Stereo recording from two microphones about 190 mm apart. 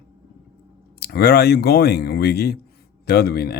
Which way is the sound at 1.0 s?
55° left (ahead or behind).